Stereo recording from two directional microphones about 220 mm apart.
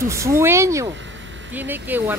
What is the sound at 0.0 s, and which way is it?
Speech, 15° right (ahead or behind).